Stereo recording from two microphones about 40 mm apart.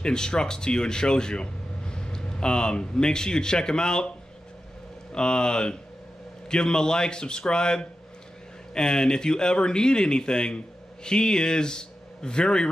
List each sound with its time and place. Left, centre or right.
0.0 s speech: centre
5.1 s speech: left